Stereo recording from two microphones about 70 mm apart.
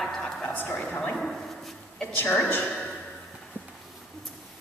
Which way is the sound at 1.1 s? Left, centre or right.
Centre.